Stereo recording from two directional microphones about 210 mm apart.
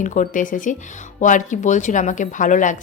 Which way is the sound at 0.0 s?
35° left (ahead or behind).